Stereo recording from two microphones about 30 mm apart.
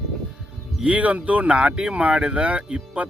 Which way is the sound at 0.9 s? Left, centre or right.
Right.